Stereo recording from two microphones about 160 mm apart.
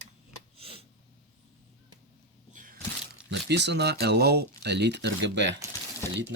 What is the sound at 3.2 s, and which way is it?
Speech, 90° right.